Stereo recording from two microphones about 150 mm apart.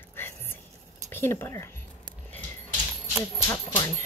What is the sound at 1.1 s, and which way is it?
Speech, 15° left (ahead or behind).